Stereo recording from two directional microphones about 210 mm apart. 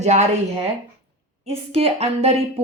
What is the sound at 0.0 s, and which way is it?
Speech, 35° right (ahead or behind).